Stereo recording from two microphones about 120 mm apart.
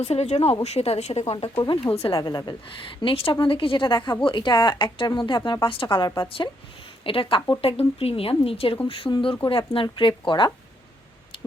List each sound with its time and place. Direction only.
0.0 s a woman's voice: 60° left (ahead or behind)
2.1 s a woman's voice: 35° left (ahead or behind)